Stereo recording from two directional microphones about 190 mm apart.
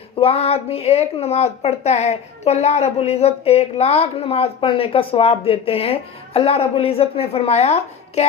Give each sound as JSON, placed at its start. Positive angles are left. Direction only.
{"t": 0.2, "sound": "a woman's voice", "side_deg": 30}